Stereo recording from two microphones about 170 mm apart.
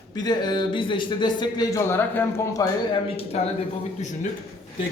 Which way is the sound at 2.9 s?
35° left (ahead or behind).